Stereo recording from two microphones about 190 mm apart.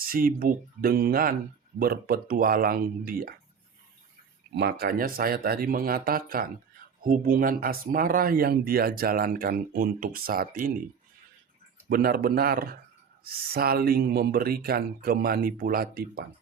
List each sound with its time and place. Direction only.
0.0 s speech: 50° right (ahead or behind)
4.5 s speech: 55° right (ahead or behind)
11.9 s speech: 50° right (ahead or behind)